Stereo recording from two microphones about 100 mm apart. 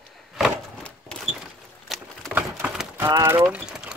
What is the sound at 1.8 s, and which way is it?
Patter, centre (ahead or behind).